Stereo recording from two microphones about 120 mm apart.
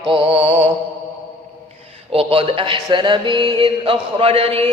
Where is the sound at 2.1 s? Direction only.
50° right (ahead or behind).